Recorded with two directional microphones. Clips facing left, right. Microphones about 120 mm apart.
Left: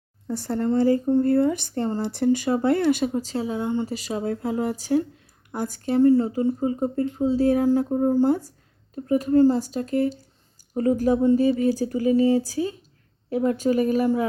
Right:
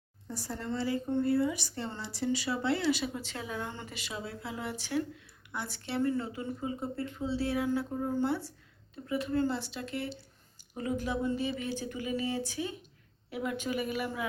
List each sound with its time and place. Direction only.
0.3 s speech: 60° left (ahead or behind)
0.7 s speech: 45° left (ahead or behind)
1.2 s speech: 50° left (ahead or behind); by 3.8 s 20° left (ahead or behind)
3.8 s speech: 40° left (ahead or behind)